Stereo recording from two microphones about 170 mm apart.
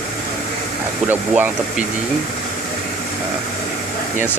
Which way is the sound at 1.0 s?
10° right (ahead or behind).